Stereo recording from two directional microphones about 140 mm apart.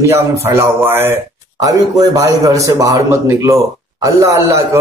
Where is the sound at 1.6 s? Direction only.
25° right (ahead or behind).